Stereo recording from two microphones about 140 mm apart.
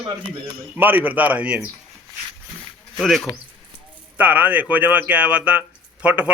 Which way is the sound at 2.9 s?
5° left (ahead or behind).